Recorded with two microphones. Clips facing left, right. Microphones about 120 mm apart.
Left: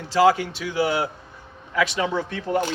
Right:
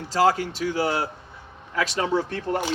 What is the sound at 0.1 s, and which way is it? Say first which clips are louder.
Speech: left 3 dB; 35° right (ahead or behind).